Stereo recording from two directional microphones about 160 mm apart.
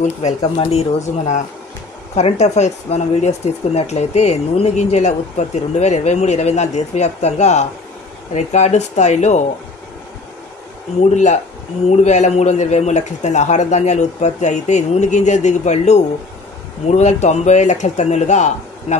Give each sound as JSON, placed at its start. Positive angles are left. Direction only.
{"t": 0.0, "sound": "speech", "side_deg": 40}
{"t": 11.0, "sound": "speech", "side_deg": 45}